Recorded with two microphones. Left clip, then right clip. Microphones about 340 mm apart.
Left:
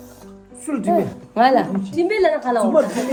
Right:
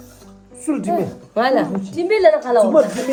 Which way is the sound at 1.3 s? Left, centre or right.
Centre.